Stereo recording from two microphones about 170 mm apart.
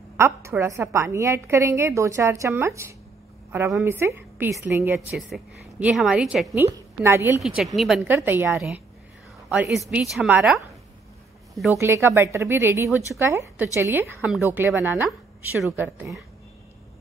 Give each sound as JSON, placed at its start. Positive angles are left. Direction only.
{"t": 0.2, "sound": "a woman's voice", "side_deg": -15}
{"t": 5.1, "sound": "a woman's voice", "side_deg": 0}
{"t": 7.4, "sound": "a woman's voice", "side_deg": 0}
{"t": 8.0, "sound": "a woman's voice", "side_deg": -10}
{"t": 8.5, "sound": "a woman's voice", "side_deg": 0}
{"t": 11.8, "sound": "a woman's voice", "side_deg": -15}
{"t": 15.7, "sound": "a woman's voice", "side_deg": -10}